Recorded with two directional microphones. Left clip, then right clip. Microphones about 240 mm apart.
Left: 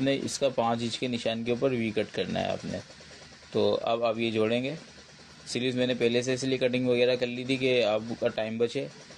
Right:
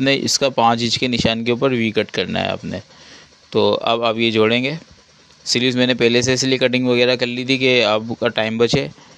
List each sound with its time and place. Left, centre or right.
0.0 s speech: right